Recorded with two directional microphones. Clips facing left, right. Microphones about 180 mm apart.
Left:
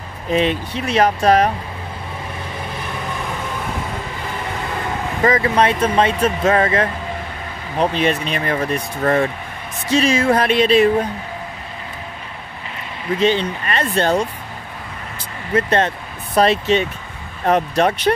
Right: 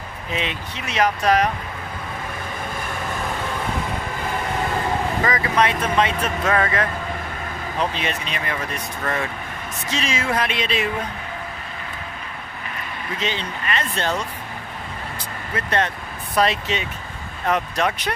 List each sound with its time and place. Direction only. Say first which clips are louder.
0.3 s speech: left 10 dB; 40° left (ahead or behind)
5.2 s speech: left 7 dB; 35° left (ahead or behind)
7.8 s speech: left 8 dB; 40° left (ahead or behind)
13.2 s speech: left 11 dB; 40° left (ahead or behind)
15.5 s speech: left 6 dB; 30° left (ahead or behind)